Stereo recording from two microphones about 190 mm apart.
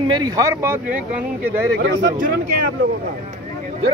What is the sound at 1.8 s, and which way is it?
Speech, 50° right (ahead or behind).